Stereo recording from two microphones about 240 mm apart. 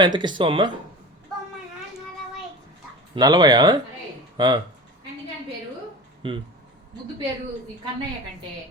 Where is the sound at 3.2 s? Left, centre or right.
Centre.